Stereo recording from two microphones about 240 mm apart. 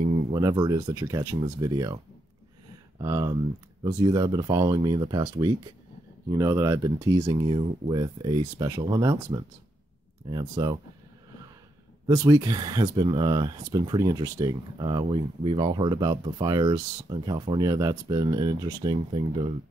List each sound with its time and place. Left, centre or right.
0.1 s speech: centre
3.0 s speech: centre
12.1 s speech: centre